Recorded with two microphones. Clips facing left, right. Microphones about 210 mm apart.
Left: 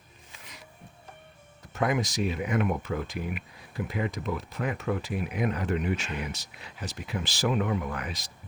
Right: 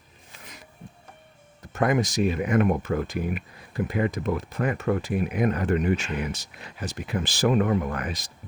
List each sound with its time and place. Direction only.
1.7 s speech: 50° right (ahead or behind)